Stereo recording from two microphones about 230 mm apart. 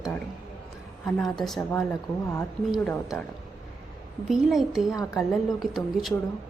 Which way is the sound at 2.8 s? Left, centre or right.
Centre.